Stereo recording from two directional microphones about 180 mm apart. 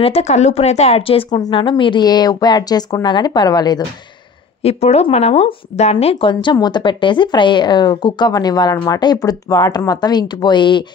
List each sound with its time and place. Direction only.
0.0 s speech: 35° left (ahead or behind)
4.6 s speech: 35° left (ahead or behind)